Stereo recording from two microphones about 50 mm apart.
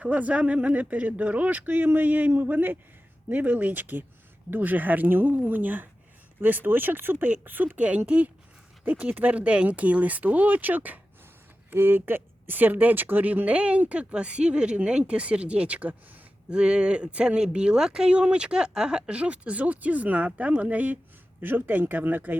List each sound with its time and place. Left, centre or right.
0.0 s speech: right
16.5 s speech: centre; by 22.4 s right